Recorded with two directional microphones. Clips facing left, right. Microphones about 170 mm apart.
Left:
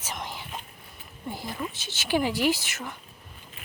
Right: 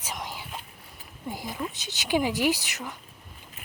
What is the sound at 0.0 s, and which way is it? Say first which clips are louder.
Whispering: even; 10° right (ahead or behind).